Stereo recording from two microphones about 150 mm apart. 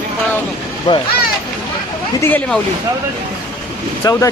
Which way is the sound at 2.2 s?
10° left (ahead or behind).